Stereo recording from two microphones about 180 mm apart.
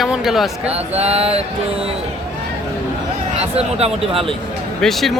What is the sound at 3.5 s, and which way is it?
Speech, 35° right (ahead or behind).